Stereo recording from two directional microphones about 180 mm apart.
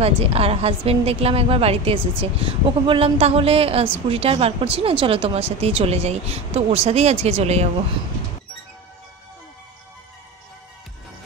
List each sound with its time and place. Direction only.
0.0 s speech: 35° right (ahead or behind)